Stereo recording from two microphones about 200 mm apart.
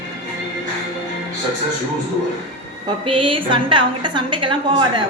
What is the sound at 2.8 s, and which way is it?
A woman's voice, 25° right (ahead or behind).